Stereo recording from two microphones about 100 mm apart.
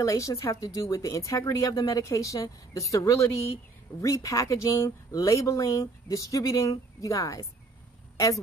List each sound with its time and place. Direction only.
0.0 s speech: 35° left (ahead or behind)